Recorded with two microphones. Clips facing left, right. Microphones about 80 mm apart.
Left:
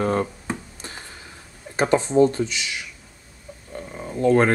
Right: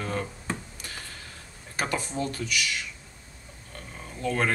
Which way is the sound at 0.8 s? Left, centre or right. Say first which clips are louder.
Left 3 dB; left.